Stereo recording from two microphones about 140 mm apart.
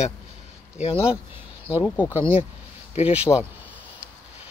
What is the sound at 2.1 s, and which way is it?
Speech, 15° right (ahead or behind).